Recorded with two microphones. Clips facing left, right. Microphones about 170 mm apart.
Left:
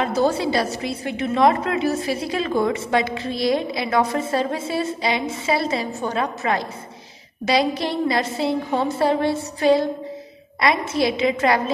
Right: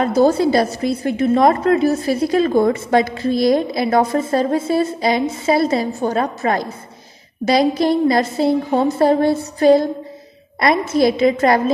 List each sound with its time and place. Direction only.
0.0 s a woman's voice: 45° right (ahead or behind)